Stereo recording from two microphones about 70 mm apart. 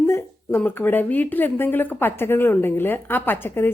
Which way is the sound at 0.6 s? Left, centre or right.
Left.